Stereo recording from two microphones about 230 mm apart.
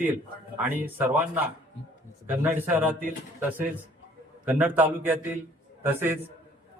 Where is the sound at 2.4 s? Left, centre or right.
Centre.